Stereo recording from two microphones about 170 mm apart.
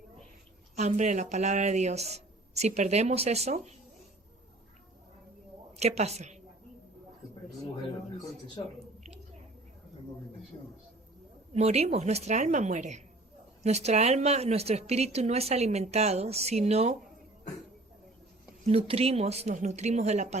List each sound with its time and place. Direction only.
0.8 s a woman's voice: 45° right (ahead or behind)
5.7 s a woman's voice: 40° right (ahead or behind)
11.5 s a woman's voice: 40° right (ahead or behind)
18.6 s a woman's voice: 35° right (ahead or behind)